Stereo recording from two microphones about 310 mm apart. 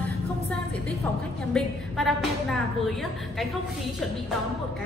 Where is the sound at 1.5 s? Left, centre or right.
Centre.